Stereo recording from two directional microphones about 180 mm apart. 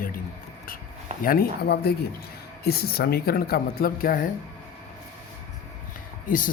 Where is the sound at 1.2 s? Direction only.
55° left (ahead or behind).